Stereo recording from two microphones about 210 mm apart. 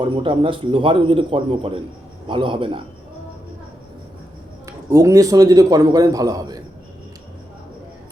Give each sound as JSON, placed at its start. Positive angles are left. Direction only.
{"t": 0.0, "sound": "speech", "side_deg": -25}
{"t": 4.6, "sound": "a man's voice", "side_deg": -15}